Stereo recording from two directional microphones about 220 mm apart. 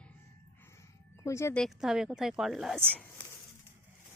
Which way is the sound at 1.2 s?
10° left (ahead or behind).